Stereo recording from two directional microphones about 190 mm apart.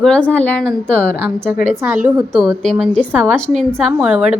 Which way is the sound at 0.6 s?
5° right (ahead or behind).